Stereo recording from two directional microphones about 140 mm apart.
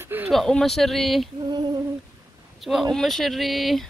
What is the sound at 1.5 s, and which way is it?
Female singing, 30° right (ahead or behind).